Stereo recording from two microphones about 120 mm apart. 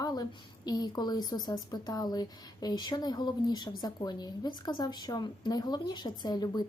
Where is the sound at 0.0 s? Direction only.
35° left (ahead or behind).